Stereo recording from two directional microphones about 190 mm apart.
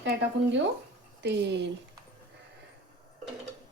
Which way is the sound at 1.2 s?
65° right (ahead or behind).